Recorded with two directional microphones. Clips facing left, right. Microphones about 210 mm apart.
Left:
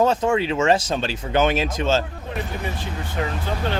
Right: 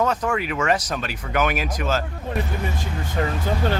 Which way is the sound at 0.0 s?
25° left (ahead or behind).